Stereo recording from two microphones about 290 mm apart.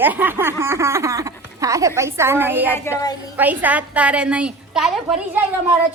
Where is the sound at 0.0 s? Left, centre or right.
Centre.